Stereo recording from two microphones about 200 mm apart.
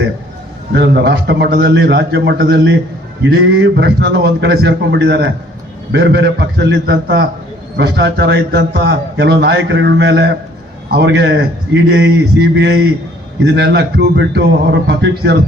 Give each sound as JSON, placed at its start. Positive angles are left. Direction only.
{"t": 0.7, "sound": "a man's voice", "side_deg": -55}